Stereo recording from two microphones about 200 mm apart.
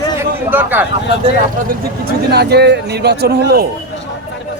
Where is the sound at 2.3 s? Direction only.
55° right (ahead or behind).